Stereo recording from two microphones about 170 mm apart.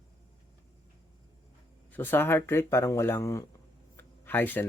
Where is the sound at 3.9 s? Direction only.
10° left (ahead or behind).